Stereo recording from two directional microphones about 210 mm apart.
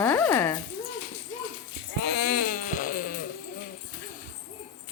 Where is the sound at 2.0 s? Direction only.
55° left (ahead or behind).